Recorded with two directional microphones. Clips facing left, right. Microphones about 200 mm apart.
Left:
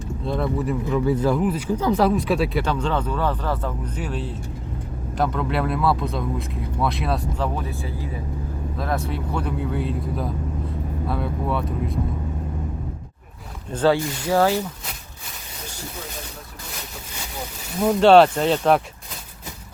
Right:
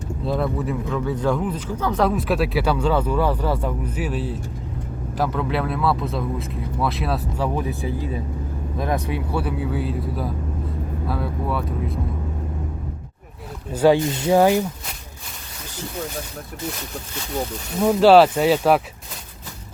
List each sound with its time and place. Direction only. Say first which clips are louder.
0.3 s speech: even; centre (ahead or behind)
13.7 s speech: right 3 dB; 10° right (ahead or behind)
17.7 s speech: right 1 dB; centre (ahead or behind)